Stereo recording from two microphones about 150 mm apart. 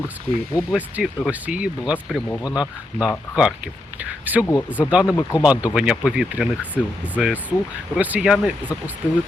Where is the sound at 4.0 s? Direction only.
10° right (ahead or behind).